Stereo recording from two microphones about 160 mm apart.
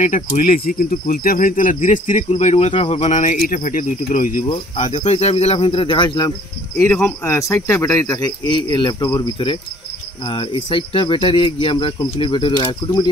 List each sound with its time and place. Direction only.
0.0 s speech: 55° left (ahead or behind); by 6.3 s 25° left (ahead or behind)
6.8 s a man's voice: 15° left (ahead or behind)